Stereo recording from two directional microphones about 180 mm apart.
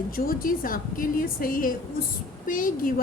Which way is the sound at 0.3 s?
50° left (ahead or behind).